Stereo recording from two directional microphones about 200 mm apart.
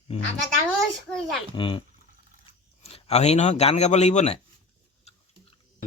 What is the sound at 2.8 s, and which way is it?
A man's voice, 30° left (ahead or behind).